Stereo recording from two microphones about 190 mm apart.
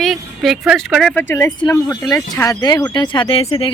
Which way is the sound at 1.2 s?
10° left (ahead or behind).